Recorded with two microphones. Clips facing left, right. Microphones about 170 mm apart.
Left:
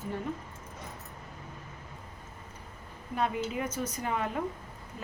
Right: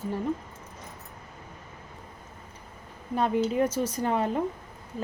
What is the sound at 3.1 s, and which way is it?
Speech, 30° right (ahead or behind).